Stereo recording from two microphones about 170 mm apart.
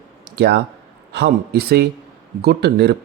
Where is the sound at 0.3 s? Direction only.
75° right (ahead or behind).